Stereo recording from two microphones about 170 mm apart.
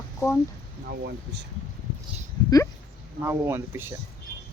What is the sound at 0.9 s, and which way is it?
Speech, 75° right (ahead or behind).